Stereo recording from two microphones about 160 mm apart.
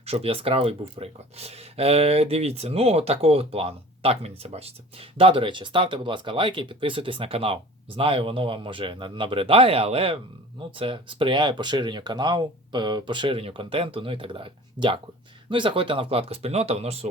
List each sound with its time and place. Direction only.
0.0 s speech: 40° right (ahead or behind)